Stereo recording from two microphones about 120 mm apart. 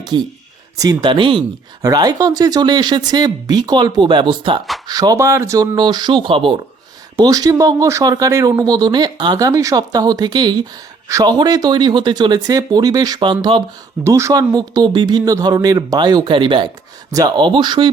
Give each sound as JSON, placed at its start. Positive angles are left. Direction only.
{"t": 0.0, "sound": "speech", "side_deg": -40}
{"t": 1.8, "sound": "speech", "side_deg": -30}
{"t": 4.9, "sound": "speech", "side_deg": -30}
{"t": 5.7, "sound": "speech", "side_deg": -40}
{"t": 7.2, "sound": "speech", "side_deg": -30}
{"t": 14.0, "sound": "speech", "side_deg": -25}
{"t": 17.1, "sound": "speech", "side_deg": -30}